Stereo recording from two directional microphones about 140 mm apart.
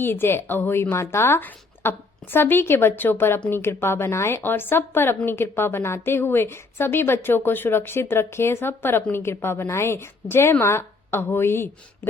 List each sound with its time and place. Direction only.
0.0 s a woman's voice: 15° left (ahead or behind)